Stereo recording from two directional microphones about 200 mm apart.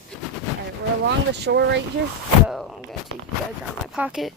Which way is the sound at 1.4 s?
60° right (ahead or behind).